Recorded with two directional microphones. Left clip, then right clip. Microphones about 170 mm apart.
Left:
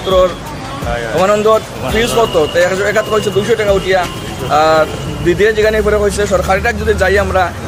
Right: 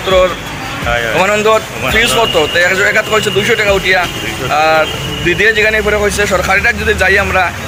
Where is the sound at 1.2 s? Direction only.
25° left (ahead or behind).